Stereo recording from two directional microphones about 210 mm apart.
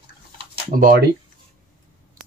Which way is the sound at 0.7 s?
45° right (ahead or behind).